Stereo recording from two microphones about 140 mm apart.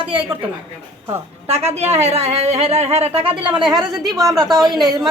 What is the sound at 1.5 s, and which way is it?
Speech, 50° right (ahead or behind).